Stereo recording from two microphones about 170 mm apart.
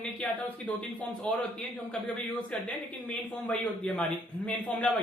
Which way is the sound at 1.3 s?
5° left (ahead or behind).